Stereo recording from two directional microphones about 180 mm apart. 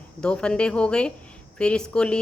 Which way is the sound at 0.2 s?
5° left (ahead or behind).